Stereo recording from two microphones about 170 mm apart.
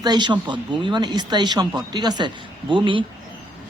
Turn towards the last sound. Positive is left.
turn(degrees=-30)  # may be behind; listen again after turning